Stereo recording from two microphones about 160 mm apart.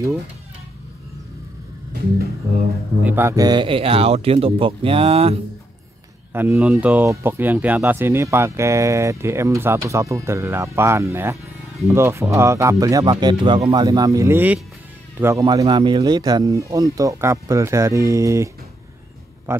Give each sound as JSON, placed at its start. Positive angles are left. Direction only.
{"t": 3.0, "sound": "speech", "side_deg": -10}
{"t": 3.4, "sound": "speech", "side_deg": -30}
{"t": 6.3, "sound": "speech", "side_deg": -15}
{"t": 13.7, "sound": "speech", "side_deg": -25}
{"t": 15.4, "sound": "speech", "side_deg": -30}